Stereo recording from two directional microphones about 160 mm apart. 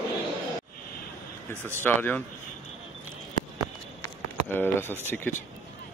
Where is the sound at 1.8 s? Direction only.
10° left (ahead or behind).